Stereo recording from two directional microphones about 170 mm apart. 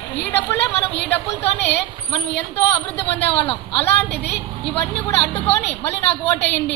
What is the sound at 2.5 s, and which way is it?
Speech, 35° left (ahead or behind).